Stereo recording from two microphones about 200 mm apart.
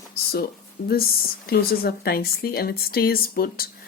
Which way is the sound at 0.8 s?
50° left (ahead or behind).